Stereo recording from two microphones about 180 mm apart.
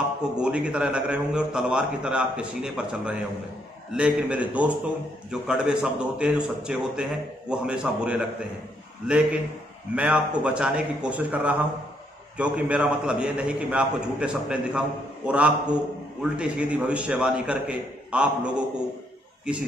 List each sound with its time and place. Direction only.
0.2 s a man's voice: 5° right (ahead or behind)